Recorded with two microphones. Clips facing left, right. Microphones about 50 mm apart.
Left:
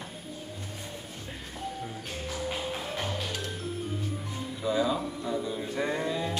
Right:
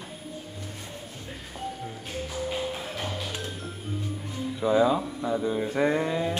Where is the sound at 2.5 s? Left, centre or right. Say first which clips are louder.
Right 2 dB; centre.